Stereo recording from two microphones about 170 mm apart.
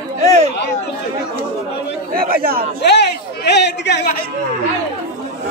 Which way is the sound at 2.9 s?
80° left.